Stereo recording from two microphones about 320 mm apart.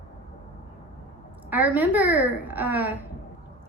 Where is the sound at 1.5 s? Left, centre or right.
Centre.